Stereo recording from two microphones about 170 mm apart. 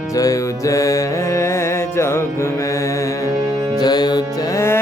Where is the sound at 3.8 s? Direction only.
25° left (ahead or behind).